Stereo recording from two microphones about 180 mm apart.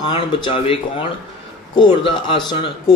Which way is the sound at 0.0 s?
30° left (ahead or behind).